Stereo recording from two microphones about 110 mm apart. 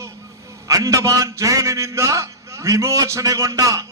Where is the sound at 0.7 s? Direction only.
30° right (ahead or behind).